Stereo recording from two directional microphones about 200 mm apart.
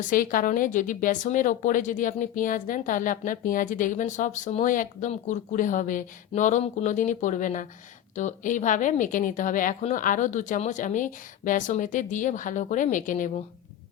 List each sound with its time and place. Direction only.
0.1 s a woman's voice: 45° left (ahead or behind)